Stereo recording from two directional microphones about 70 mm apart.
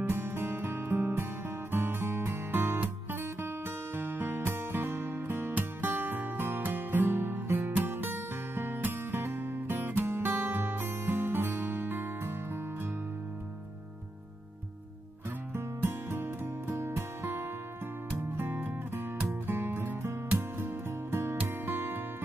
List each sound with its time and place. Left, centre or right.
0.1 s music: right
15.5 s music: right